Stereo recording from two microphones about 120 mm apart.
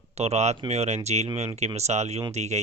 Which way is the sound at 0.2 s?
65° right (ahead or behind).